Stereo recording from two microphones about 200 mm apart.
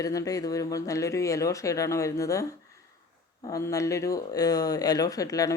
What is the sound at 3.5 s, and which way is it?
Speech, 15° left (ahead or behind).